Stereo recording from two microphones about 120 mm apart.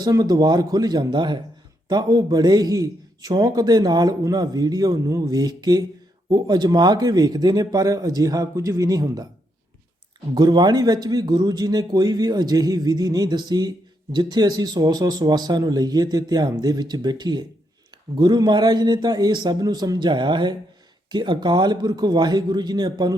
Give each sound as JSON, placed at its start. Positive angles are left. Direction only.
{"t": 0.0, "sound": "a man's voice", "side_deg": -35}
{"t": 10.3, "sound": "a man's voice", "side_deg": -35}